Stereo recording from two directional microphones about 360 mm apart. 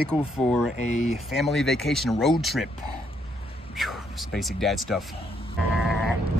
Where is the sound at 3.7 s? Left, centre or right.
Centre.